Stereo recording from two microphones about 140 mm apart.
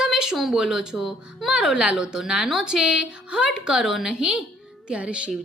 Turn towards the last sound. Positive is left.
turn(degrees=-10)  # may be behind; listen again after turning